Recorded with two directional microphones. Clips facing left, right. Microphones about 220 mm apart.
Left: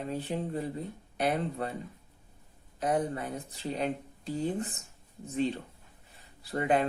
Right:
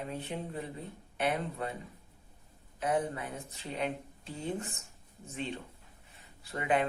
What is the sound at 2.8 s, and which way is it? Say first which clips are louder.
Speech: left 2 dB; 35° left (ahead or behind).